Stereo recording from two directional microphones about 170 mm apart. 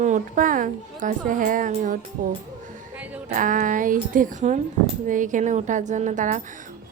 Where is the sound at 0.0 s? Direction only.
50° right (ahead or behind).